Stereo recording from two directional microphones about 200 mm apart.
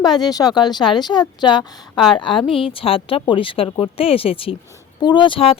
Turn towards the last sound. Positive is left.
turn(degrees=25)  # may be behind; listen again after turning